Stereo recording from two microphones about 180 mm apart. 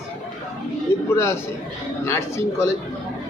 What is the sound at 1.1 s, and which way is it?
A man's voice, 15° left (ahead or behind).